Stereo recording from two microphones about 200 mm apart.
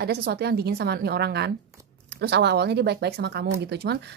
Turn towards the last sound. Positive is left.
turn(degrees=-55)  # may be behind; listen again after turning